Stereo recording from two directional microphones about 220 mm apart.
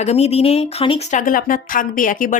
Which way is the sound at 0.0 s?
30° left (ahead or behind).